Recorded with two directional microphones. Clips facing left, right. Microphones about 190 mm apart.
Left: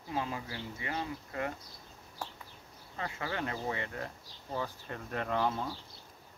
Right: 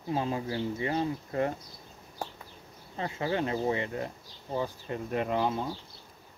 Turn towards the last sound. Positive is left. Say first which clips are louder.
# right 3 dB
turn(degrees=-20)  # may be behind; listen again after turning